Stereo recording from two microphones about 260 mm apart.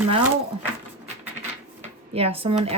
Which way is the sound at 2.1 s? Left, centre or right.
Right.